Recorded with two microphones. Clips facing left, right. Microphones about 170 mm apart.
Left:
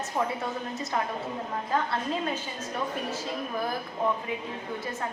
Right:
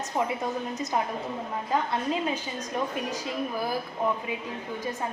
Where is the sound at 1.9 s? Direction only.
10° right (ahead or behind).